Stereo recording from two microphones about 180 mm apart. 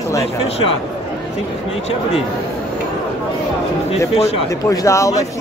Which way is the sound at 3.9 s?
35° left (ahead or behind).